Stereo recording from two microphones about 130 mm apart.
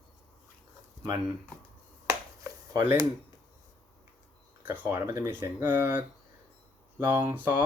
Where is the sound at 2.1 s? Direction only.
25° right (ahead or behind).